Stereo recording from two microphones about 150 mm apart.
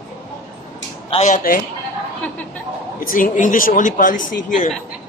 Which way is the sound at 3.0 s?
65° left (ahead or behind).